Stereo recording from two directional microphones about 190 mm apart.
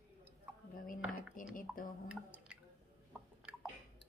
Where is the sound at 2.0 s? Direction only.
5° right (ahead or behind).